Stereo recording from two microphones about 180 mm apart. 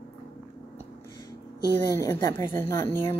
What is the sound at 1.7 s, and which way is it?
Speech, 15° left (ahead or behind).